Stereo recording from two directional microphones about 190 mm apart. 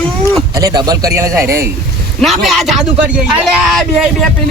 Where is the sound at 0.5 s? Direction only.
20° right (ahead or behind).